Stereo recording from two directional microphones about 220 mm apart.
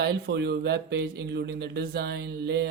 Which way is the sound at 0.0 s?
50° right (ahead or behind).